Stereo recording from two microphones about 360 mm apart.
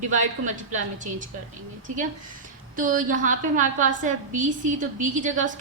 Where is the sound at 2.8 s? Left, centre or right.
Right.